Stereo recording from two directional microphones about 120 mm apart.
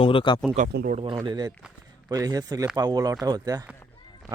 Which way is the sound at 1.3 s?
35° right (ahead or behind).